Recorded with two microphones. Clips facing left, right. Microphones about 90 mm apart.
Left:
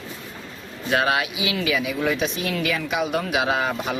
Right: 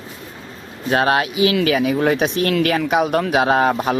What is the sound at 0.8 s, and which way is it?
Speech, 45° right (ahead or behind).